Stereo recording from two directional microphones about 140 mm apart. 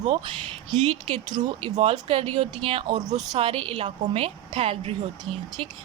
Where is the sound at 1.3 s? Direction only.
30° right (ahead or behind).